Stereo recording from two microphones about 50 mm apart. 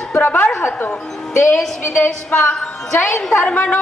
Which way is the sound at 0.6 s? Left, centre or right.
Left.